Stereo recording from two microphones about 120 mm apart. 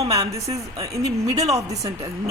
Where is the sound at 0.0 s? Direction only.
30° right (ahead or behind).